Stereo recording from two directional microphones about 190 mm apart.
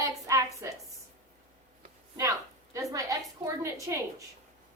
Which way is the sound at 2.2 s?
15° right (ahead or behind).